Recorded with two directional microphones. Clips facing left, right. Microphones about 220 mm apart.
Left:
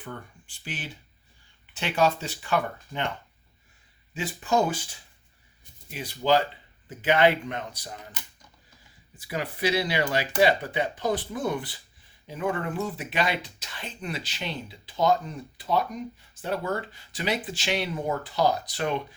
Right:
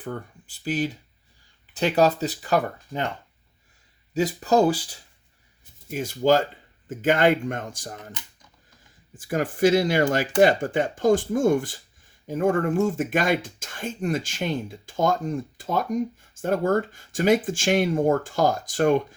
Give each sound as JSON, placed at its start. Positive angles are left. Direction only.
{"t": 0.0, "sound": "speech", "side_deg": -40}
{"t": 4.1, "sound": "speech", "side_deg": -40}
{"t": 9.1, "sound": "speech", "side_deg": -45}